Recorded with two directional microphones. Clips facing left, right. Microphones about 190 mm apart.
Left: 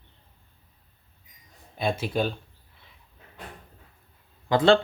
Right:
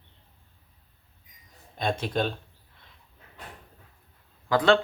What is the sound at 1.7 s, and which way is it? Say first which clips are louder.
Speech: left 1 dB; 5° left (ahead or behind).